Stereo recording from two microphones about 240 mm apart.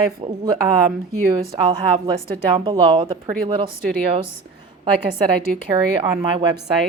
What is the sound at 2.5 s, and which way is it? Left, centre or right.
A woman's voice, right.